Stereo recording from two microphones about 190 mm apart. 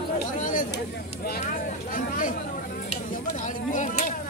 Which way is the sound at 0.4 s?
45° left (ahead or behind).